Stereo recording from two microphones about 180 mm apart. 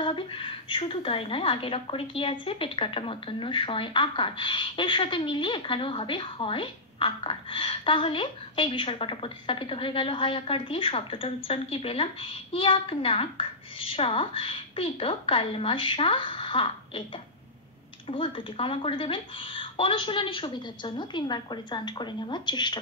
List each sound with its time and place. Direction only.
0.0 s a woman's voice: 25° left (ahead or behind)
18.0 s a woman's voice: 25° left (ahead or behind)